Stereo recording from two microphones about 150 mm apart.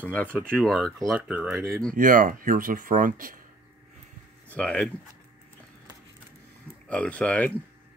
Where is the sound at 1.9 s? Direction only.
65° right (ahead or behind).